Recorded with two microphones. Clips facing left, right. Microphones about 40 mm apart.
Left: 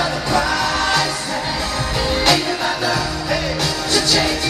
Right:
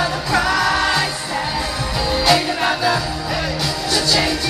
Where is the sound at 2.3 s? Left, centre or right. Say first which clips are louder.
Right 2 dB; right.